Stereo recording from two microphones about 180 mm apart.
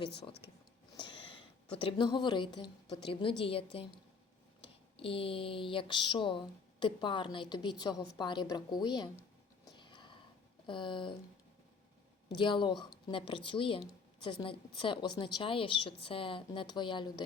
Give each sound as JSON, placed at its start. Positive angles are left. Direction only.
{"t": 0.9, "sound": "a sound", "side_deg": 25}
{"t": 1.8, "sound": "speech", "side_deg": 25}
{"t": 4.9, "sound": "speech", "side_deg": 30}
{"t": 9.6, "sound": "a sound", "side_deg": 25}
{"t": 10.7, "sound": "speech", "side_deg": 25}
{"t": 12.4, "sound": "speech", "side_deg": 25}